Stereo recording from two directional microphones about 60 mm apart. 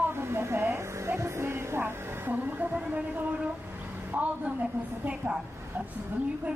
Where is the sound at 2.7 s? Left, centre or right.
Right.